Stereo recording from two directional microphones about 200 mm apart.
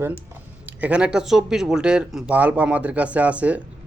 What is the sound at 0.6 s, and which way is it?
A man's voice, 5° right (ahead or behind).